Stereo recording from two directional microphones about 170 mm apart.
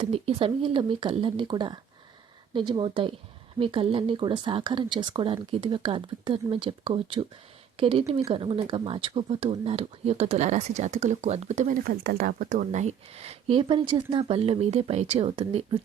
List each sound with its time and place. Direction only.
0.0 s speech: 35° right (ahead or behind)
11.9 s speech: 60° right (ahead or behind); by 15.8 s 30° right (ahead or behind)